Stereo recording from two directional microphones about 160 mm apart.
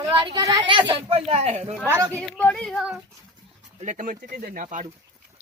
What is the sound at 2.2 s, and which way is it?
Speech, 5° left (ahead or behind).